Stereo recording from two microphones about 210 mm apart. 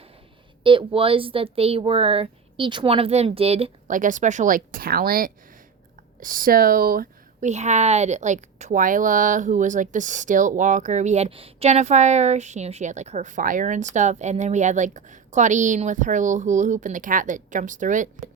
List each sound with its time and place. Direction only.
0.6 s speech: 25° right (ahead or behind)